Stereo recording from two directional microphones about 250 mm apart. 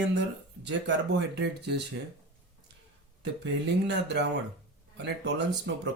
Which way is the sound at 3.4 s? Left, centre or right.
Right.